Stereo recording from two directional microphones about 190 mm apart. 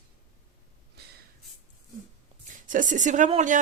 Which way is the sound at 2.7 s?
45° right (ahead or behind).